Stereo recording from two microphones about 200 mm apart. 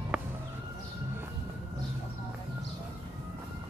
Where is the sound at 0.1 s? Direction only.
5° right (ahead or behind).